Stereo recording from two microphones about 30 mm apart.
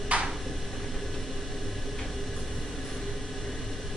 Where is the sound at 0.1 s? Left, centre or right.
Right.